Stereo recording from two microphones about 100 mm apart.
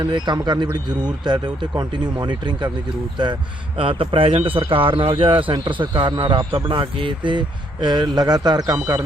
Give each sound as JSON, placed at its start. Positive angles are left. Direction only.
{"t": 0.3, "sound": "speech", "side_deg": -45}
{"t": 3.8, "sound": "a man's voice", "side_deg": -65}